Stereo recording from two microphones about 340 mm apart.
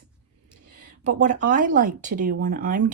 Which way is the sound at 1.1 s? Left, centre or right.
Right.